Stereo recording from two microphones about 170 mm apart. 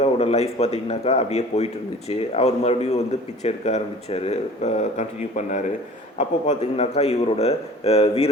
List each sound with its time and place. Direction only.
0.0 s a man's voice: 40° left (ahead or behind)